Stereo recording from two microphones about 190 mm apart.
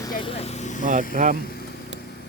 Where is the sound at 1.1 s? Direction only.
45° right (ahead or behind).